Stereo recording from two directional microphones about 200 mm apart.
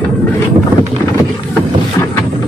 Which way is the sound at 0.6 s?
25° right (ahead or behind).